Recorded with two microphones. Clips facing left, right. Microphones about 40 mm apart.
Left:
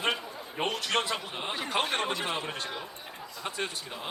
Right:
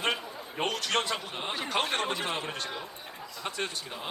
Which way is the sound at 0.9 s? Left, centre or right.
Left.